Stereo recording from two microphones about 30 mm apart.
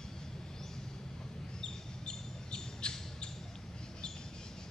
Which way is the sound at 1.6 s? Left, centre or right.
Left.